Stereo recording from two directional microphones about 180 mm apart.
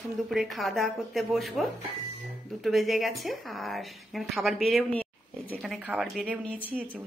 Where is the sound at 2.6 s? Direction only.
Centre (ahead or behind).